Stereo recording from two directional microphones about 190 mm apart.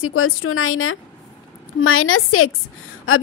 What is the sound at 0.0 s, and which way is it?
A woman's voice, 90° left.